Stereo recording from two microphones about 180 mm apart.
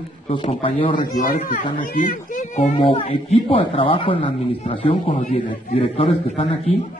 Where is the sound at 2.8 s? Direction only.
30° left (ahead or behind).